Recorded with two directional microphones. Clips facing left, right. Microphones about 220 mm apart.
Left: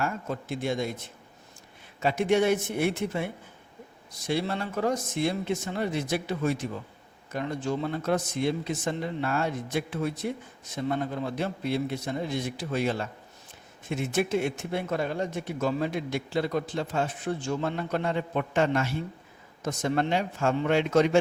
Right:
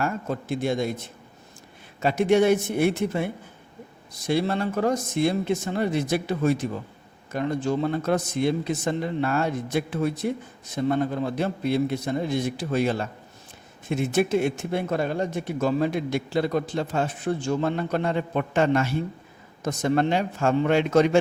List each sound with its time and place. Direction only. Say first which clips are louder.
0.0 s a man's voice: right 4 dB; 40° right (ahead or behind)
4.3 s a man's voice: right 5 dB; 40° right (ahead or behind)